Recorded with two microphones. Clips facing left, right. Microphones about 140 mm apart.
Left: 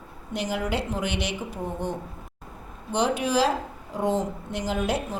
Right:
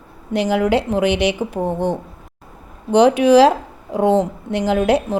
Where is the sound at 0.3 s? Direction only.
85° right.